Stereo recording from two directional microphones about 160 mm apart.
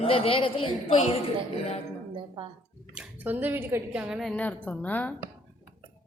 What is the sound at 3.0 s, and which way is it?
A woman's voice, 10° right (ahead or behind).